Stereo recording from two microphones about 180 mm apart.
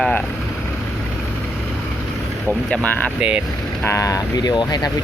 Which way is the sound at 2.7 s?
10° left (ahead or behind).